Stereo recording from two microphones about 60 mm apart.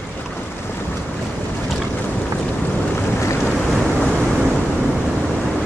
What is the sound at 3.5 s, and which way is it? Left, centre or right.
Boat, centre.